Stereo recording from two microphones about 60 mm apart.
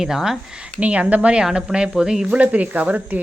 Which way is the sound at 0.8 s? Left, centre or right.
Right.